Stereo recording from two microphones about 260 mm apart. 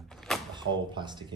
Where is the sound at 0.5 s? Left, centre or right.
Centre.